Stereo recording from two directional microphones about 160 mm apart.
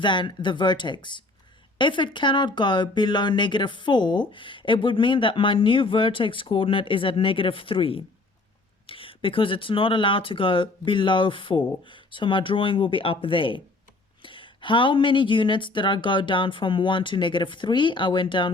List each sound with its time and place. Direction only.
0.0 s speech: 30° left (ahead or behind)